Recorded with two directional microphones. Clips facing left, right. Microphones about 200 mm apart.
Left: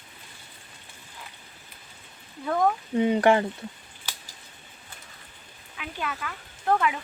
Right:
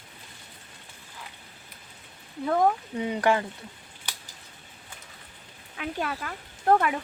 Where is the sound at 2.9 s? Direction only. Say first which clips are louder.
Left 5 dB; 25° left (ahead or behind).